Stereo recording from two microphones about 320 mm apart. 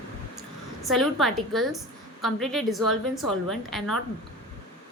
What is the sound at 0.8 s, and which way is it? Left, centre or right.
A woman's voice, centre.